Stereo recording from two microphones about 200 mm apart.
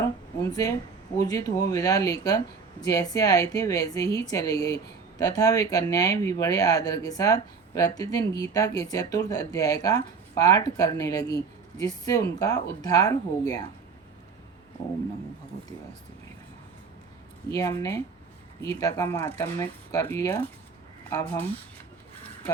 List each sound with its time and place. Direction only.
0.4 s a woman's voice: 15° left (ahead or behind)
17.5 s a woman's voice: 15° left (ahead or behind)